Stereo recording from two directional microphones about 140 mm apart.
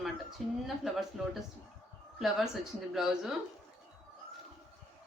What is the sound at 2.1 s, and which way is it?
A woman's voice, centre (ahead or behind).